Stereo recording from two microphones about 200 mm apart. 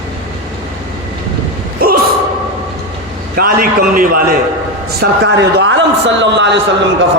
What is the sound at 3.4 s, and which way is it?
A man's voice, 45° right (ahead or behind).